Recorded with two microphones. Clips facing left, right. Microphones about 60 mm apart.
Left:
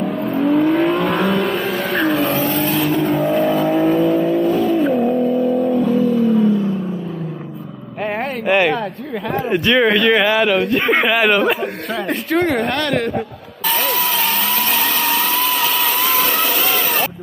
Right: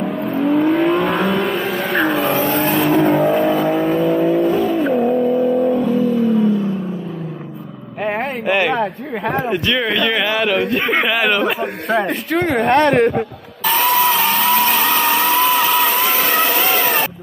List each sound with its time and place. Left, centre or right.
0.0 s vehicle: centre
2.3 s vehicle: right
3.0 s vehicle: centre
8.0 s vehicle: centre
9.5 s speech: centre
12.7 s a woman's voice: right
14.0 s vehicle: centre
15.0 s vehicle: right
15.4 s a sound: centre
16.7 s a sound: right